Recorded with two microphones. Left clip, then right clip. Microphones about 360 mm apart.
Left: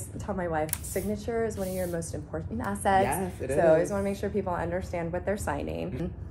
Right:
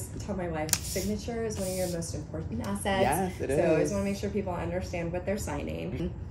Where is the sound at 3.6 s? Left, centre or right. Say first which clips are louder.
Left 6 dB; left.